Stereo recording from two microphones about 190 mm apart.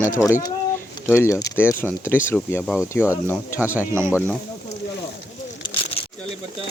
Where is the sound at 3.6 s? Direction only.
10° right (ahead or behind).